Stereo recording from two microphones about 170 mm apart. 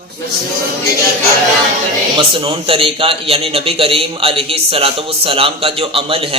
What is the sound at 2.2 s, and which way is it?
A man's voice, 35° right (ahead or behind).